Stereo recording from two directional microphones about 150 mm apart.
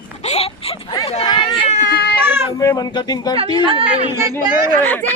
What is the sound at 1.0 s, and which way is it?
Speech, 40° left (ahead or behind).